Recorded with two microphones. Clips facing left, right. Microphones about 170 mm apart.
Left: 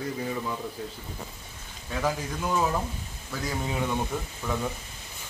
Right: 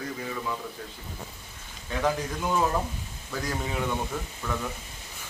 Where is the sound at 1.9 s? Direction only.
Centre (ahead or behind).